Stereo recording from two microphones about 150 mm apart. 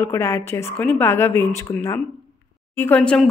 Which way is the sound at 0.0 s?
20° left (ahead or behind).